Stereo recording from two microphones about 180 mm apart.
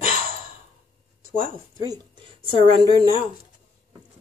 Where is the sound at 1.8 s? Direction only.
25° right (ahead or behind).